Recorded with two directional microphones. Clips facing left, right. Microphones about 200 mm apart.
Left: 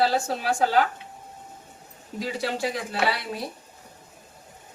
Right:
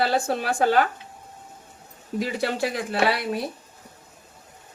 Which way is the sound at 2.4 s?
65° right (ahead or behind).